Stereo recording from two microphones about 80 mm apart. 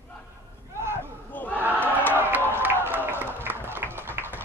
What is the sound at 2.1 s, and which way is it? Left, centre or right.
Crowd, right.